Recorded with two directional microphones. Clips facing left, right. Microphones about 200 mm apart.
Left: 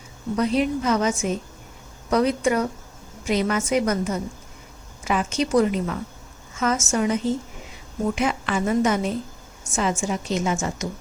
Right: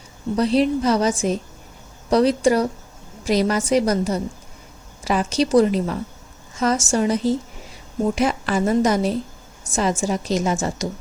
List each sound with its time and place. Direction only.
0.3 s a woman's voice: 30° right (ahead or behind)